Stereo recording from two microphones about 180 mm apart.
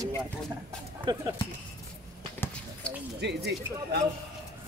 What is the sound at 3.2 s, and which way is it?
Speech, 70° right (ahead or behind).